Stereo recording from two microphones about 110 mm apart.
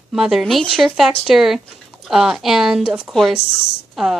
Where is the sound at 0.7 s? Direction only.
Centre (ahead or behind).